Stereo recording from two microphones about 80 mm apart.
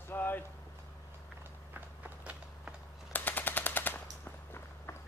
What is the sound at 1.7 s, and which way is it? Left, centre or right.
Walk, centre.